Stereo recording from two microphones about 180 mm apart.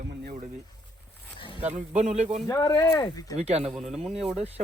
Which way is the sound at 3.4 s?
35° right (ahead or behind).